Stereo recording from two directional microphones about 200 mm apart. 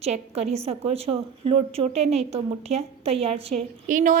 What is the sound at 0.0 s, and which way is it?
A woman's voice, 30° right (ahead or behind).